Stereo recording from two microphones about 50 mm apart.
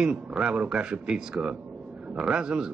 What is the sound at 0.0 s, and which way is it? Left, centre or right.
A man's voice, centre.